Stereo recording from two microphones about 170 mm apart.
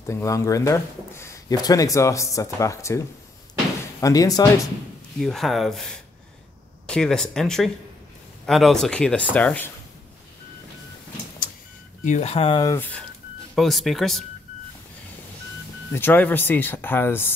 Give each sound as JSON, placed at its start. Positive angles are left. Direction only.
{"t": 0.0, "sound": "speech", "side_deg": 15}
{"t": 4.0, "sound": "speech", "side_deg": 20}
{"t": 5.2, "sound": "speech", "side_deg": 0}
{"t": 12.0, "sound": "speech", "side_deg": 40}
{"t": 12.7, "sound": "speech", "side_deg": 10}
{"t": 13.6, "sound": "speech", "side_deg": 0}
{"t": 15.9, "sound": "speech", "side_deg": 10}